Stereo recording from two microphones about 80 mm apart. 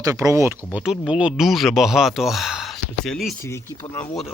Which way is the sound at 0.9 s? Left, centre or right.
Centre.